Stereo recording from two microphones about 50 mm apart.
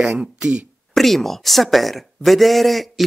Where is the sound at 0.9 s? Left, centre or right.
Centre.